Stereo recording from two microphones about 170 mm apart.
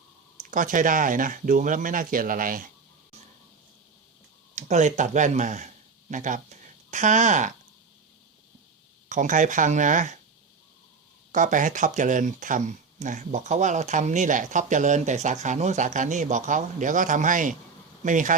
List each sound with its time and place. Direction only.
0.5 s speech: 50° right (ahead or behind)
4.5 s speech: 45° right (ahead or behind)
9.0 s speech: 50° right (ahead or behind)
11.3 s speech: 45° right (ahead or behind)